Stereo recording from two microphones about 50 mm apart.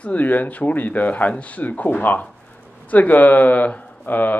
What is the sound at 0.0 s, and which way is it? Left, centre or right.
Speech, left.